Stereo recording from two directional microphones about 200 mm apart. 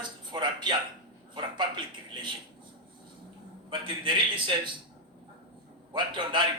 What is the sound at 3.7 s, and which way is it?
A man's voice, 25° right (ahead or behind).